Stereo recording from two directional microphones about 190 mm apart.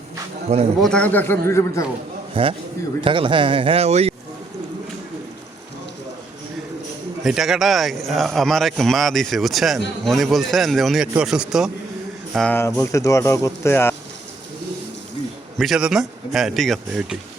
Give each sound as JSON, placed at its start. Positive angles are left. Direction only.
{"t": 0.8, "sound": "speech", "side_deg": 5}
{"t": 2.3, "sound": "a man's voice", "side_deg": -30}
{"t": 7.2, "sound": "a man's voice", "side_deg": 0}
{"t": 15.5, "sound": "a man's voice", "side_deg": 0}